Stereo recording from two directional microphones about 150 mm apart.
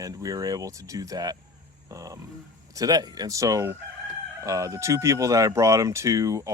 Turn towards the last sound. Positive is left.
turn(degrees=-20)  # may be behind; listen again after turning